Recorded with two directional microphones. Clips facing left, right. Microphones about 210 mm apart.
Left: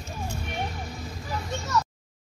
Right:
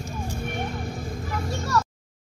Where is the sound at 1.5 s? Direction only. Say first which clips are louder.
Right 2 dB; 20° left (ahead or behind).